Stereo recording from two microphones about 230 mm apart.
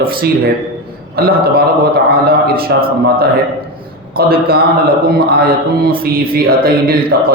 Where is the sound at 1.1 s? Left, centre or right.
Right.